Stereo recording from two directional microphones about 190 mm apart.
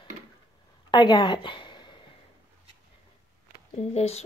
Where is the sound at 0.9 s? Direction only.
25° left (ahead or behind).